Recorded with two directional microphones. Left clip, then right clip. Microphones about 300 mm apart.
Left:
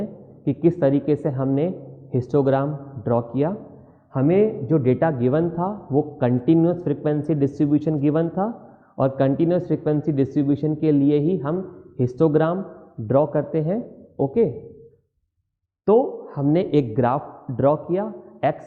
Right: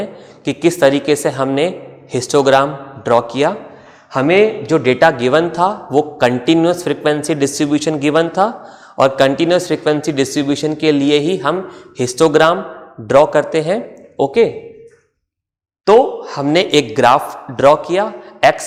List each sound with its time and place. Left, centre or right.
0.0 s a man's voice: centre
16.0 s speech: right
16.2 s a man's voice: centre